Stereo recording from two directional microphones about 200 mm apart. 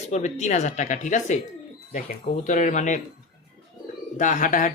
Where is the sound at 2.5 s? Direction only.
40° left (ahead or behind).